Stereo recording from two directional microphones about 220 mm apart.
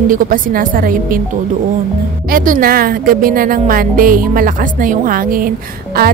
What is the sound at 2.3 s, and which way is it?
Speech, 40° right (ahead or behind).